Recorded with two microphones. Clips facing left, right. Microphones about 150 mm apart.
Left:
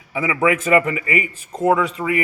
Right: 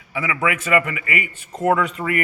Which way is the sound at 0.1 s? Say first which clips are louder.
Left 4 dB; 25° left (ahead or behind).